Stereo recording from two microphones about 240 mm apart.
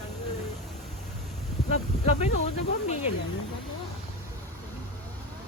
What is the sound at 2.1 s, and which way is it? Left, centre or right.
Speech, left.